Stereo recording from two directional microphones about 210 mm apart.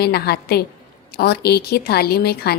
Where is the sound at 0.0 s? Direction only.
50° left (ahead or behind).